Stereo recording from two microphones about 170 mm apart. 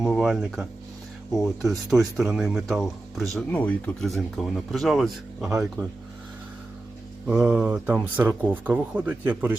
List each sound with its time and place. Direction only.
0.0 s speech: 5° right (ahead or behind)
5.8 s speech: 20° right (ahead or behind)
7.3 s speech: 10° right (ahead or behind)